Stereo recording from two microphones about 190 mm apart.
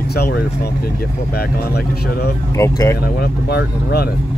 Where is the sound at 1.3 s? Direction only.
60° left (ahead or behind).